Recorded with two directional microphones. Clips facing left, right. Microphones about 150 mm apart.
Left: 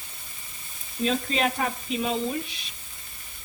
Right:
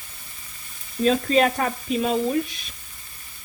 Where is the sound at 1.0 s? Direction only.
45° right (ahead or behind).